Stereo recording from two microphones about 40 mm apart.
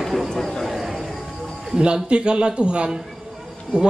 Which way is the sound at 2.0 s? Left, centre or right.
Right.